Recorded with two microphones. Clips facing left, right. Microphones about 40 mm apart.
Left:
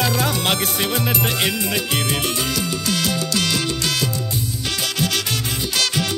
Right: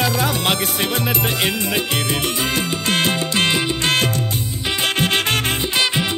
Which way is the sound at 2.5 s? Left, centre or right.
Right.